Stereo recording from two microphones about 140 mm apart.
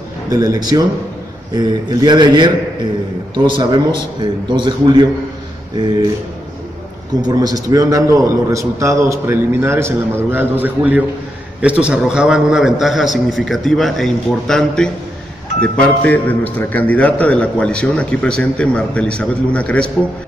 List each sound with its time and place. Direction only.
0.3 s a man's voice: 25° right (ahead or behind)
3.5 s a man's voice: 35° right (ahead or behind)
7.2 s a man's voice: 30° right (ahead or behind); by 19.9 s 10° left (ahead or behind)